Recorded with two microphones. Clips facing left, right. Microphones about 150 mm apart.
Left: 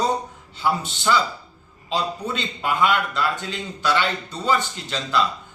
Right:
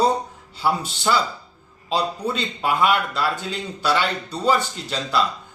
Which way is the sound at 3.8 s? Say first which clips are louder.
Right 1 dB; 35° right (ahead or behind).